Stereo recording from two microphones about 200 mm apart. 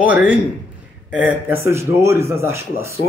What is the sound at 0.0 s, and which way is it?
A man's voice, 5° right (ahead or behind).